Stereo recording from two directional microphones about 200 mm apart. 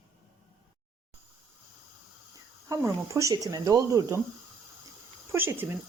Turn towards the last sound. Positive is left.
turn(degrees=-10)  # may be behind; listen again after turning